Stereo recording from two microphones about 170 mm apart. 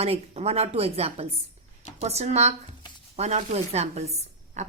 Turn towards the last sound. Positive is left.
turn(degrees=-40)  # may be behind; listen again after turning